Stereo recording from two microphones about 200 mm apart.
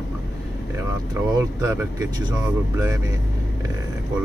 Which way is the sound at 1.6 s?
15° right (ahead or behind).